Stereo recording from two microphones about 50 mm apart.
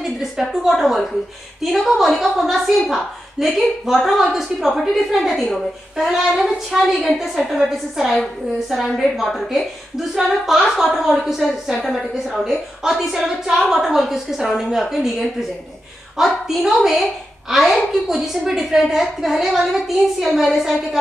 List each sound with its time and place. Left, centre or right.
0.0 s a woman's voice: centre
16.4 s a woman's voice: centre